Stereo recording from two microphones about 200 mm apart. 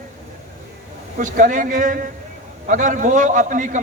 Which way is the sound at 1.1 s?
40° right (ahead or behind).